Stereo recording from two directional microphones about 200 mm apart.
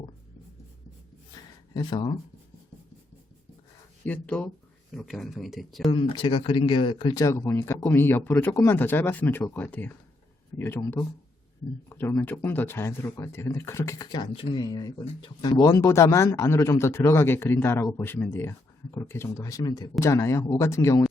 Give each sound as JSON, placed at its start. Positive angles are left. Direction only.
{"t": 1.7, "sound": "speech", "side_deg": 20}
{"t": 4.0, "sound": "speech", "side_deg": 5}
{"t": 5.9, "sound": "speech", "side_deg": 25}